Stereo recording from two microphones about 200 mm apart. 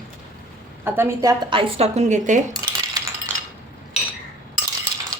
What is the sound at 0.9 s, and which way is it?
A woman's voice, 10° right (ahead or behind).